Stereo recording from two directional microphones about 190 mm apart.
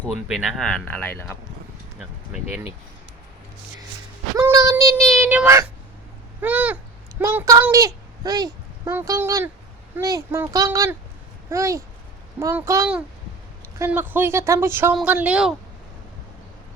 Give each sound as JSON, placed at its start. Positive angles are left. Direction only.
{"t": 0.3, "sound": "speech", "side_deg": 0}
{"t": 2.0, "sound": "a sound", "side_deg": -5}
{"t": 4.4, "sound": "child singing", "side_deg": -15}
{"t": 5.1, "sound": "a child's voice", "side_deg": -10}